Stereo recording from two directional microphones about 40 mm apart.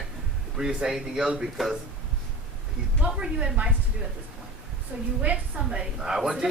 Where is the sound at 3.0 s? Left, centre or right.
Right.